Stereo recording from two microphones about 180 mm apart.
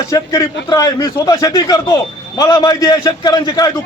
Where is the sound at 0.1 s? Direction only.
15° left (ahead or behind).